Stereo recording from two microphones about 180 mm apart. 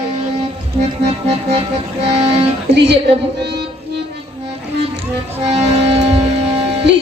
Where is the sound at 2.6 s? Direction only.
70° right (ahead or behind).